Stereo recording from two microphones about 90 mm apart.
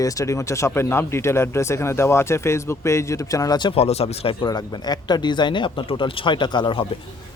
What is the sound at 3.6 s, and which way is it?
Speech, 85° left.